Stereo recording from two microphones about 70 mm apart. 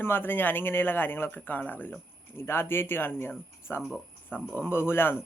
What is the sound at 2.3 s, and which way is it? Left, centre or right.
Speech, left.